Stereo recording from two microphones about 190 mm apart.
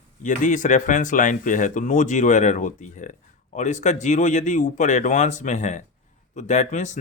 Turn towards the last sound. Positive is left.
turn(degrees=40)  # may be behind; listen again after turning